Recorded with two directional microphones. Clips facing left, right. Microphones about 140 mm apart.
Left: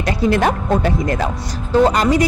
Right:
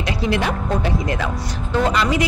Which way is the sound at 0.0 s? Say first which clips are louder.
Left 5 dB; 50° left (ahead or behind).